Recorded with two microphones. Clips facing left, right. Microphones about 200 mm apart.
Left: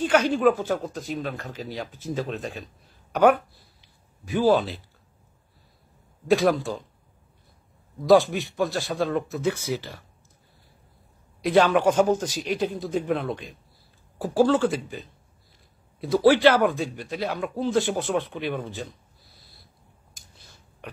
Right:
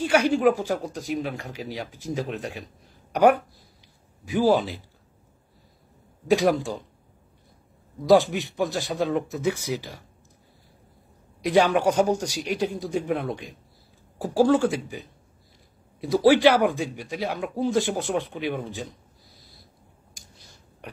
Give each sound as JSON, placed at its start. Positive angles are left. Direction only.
{"t": 0.0, "sound": "speech", "side_deg": -10}
{"t": 6.3, "sound": "speech", "side_deg": -15}
{"t": 8.1, "sound": "speech", "side_deg": -20}
{"t": 11.4, "sound": "speech", "side_deg": -15}